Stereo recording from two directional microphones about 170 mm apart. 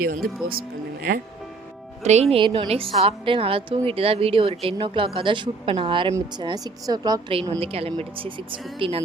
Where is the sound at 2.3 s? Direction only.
30° right (ahead or behind).